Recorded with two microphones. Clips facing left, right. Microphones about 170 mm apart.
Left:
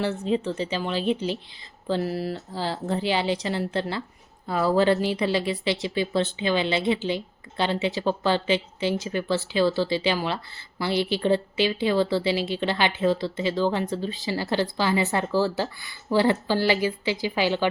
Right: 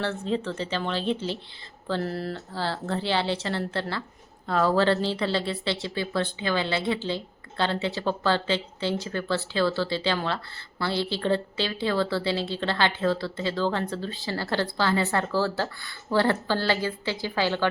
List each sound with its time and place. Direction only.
0.0 s speech: 15° left (ahead or behind)